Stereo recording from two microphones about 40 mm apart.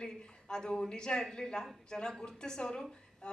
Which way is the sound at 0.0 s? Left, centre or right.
Centre.